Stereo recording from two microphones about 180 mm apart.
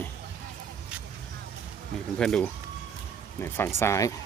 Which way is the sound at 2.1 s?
5° left (ahead or behind).